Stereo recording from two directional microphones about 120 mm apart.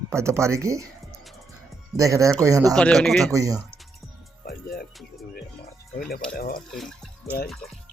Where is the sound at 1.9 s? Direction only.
25° right (ahead or behind).